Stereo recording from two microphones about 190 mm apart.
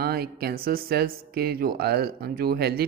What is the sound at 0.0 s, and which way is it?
Speech, 55° right (ahead or behind).